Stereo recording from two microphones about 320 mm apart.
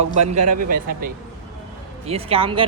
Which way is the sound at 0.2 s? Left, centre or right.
Right.